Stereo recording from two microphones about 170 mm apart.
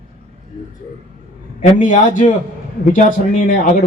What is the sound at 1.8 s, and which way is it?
Speech, 50° left (ahead or behind).